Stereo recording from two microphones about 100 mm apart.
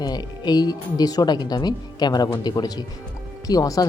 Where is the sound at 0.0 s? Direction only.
45° left (ahead or behind).